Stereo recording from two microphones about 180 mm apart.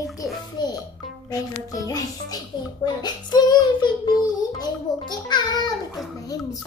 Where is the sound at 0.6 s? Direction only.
25° left (ahead or behind).